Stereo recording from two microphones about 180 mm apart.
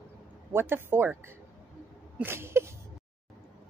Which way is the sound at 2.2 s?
15° right (ahead or behind).